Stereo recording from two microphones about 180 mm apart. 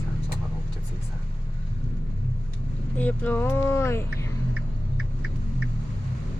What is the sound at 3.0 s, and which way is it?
Speech, 10° left (ahead or behind).